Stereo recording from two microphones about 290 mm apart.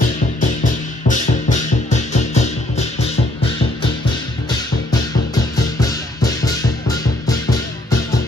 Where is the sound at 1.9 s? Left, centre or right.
Left.